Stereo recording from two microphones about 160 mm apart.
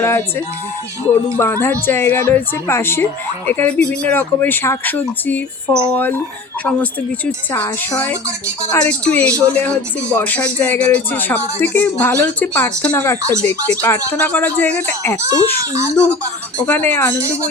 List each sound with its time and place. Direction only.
0.0 s speech: 15° left (ahead or behind)
7.3 s speech: 10° left (ahead or behind)
15.7 s speech: 20° right (ahead or behind)
16.6 s speech: 10° left (ahead or behind)